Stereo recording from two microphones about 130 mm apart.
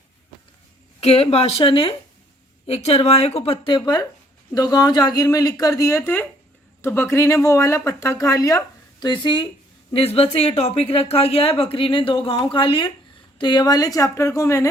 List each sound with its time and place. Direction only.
1.0 s a woman's voice: 50° left (ahead or behind)
2.6 s a woman's voice: 50° left (ahead or behind)
3.8 s speech: 30° left (ahead or behind)
6.0 s speech: 10° left (ahead or behind); by 9.5 s 40° left (ahead or behind)
9.9 s a woman's voice: 50° left (ahead or behind); by 14.7 s 20° left (ahead or behind)